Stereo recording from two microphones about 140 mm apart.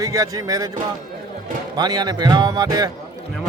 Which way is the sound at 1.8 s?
30° right (ahead or behind).